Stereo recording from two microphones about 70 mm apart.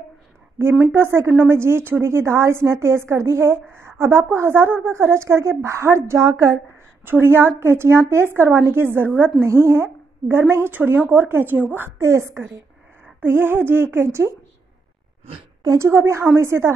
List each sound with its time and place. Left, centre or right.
0.6 s a woman's voice: right
12.0 s speech: right
15.8 s speech: right